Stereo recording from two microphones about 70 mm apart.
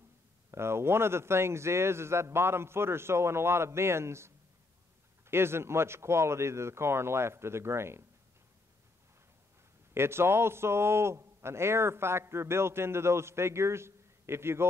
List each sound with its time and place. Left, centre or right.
0.5 s a man's voice: right
9.9 s a man's voice: right